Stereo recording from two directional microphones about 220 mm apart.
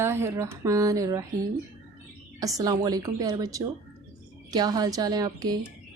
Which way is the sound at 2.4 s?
15° right (ahead or behind).